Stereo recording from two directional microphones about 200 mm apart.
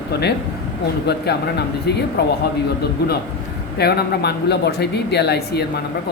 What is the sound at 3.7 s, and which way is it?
Speech, 55° left (ahead or behind).